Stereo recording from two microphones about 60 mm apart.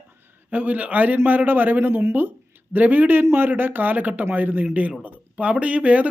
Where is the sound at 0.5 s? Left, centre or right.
Right.